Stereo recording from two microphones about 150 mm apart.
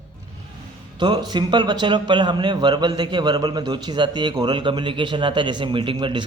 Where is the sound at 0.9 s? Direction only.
30° right (ahead or behind).